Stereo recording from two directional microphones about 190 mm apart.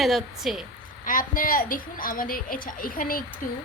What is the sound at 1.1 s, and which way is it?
A woman's voice, 45° left (ahead or behind).